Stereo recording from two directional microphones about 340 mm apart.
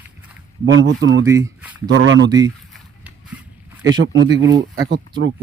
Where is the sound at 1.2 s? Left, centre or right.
Centre.